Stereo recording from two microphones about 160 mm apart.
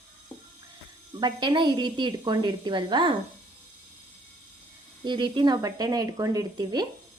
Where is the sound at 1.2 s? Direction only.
25° right (ahead or behind).